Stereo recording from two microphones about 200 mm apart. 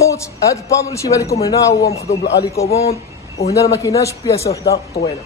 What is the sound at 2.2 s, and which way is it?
Speech, 55° left (ahead or behind).